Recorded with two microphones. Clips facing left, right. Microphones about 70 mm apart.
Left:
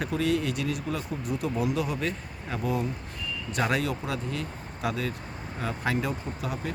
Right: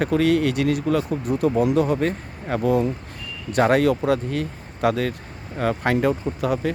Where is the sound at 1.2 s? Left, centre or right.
Right.